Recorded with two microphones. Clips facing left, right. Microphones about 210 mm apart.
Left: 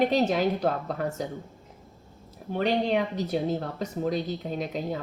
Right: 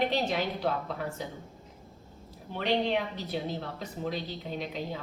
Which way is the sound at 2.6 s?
45° left (ahead or behind).